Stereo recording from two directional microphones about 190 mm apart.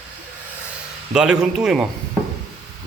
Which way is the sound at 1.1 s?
5° right (ahead or behind).